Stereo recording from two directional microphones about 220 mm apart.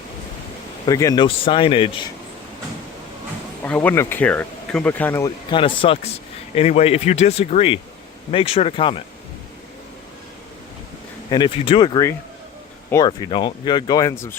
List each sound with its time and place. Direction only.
0.9 s speech: 15° left (ahead or behind)
3.6 s speech: 5° left (ahead or behind); by 9.0 s 25° left (ahead or behind)
11.3 s speech: 20° left (ahead or behind)